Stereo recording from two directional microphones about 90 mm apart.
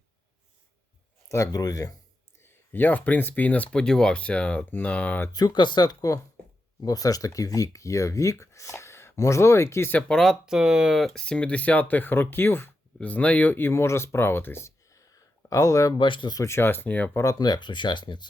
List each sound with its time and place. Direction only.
1.3 s speech: 40° left (ahead or behind)
2.4 s speech: 20° left (ahead or behind)
5.3 s speech: 45° left (ahead or behind); by 10.0 s 30° left (ahead or behind)
10.1 s speech: centre (ahead or behind); by 16.0 s 40° left (ahead or behind)
16.0 s speech: 65° left (ahead or behind)
16.3 s speech: 35° left (ahead or behind)
17.2 s speech: 40° left (ahead or behind); by 18.3 s 60° left (ahead or behind)